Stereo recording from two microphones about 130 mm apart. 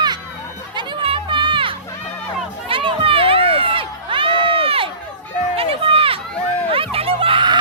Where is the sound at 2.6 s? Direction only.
45° right (ahead or behind).